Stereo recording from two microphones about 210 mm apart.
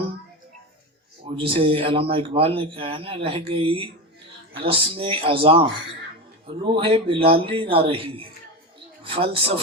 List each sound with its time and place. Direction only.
1.2 s speech: 25° right (ahead or behind)